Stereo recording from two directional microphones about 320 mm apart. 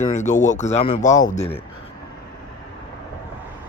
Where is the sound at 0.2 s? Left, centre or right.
Left.